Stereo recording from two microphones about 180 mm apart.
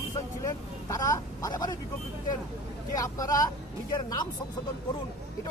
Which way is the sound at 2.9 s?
20° left (ahead or behind).